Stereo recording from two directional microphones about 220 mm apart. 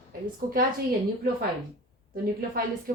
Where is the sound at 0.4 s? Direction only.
40° right (ahead or behind).